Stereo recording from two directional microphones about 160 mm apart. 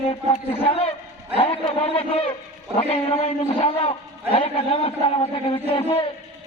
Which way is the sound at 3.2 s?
35° left (ahead or behind).